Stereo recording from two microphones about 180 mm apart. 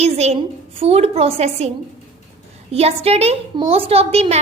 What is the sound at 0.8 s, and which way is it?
Speech, 35° right (ahead or behind).